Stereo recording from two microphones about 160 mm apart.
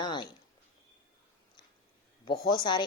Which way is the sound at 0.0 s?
30° left (ahead or behind).